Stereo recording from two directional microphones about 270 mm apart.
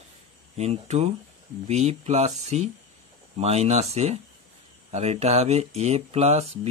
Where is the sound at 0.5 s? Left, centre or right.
Right.